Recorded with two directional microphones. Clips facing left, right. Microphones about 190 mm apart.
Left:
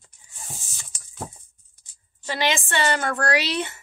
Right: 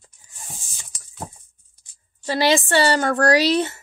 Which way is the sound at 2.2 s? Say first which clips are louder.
Right 6 dB; 35° right (ahead or behind).